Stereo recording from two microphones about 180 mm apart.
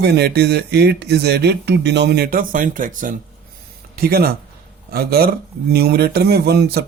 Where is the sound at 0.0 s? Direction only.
65° right (ahead or behind).